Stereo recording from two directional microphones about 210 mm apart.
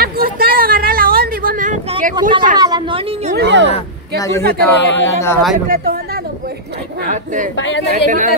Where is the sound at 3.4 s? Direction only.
60° right (ahead or behind).